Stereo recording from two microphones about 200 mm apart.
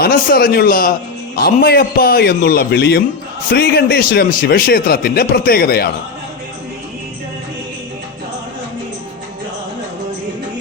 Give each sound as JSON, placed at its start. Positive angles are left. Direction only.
{"t": 0.0, "sound": "a man's voice", "side_deg": 50}